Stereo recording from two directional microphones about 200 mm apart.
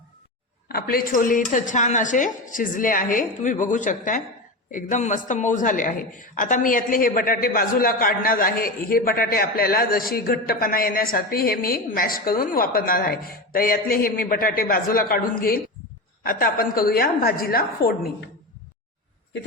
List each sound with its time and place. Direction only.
0.7 s a woman's voice: 50° left (ahead or behind)